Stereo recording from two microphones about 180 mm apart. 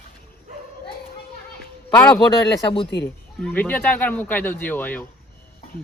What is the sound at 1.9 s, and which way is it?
Speech, 10° left (ahead or behind).